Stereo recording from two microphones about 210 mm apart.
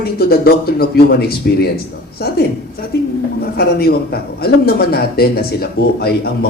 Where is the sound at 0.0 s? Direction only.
45° left (ahead or behind).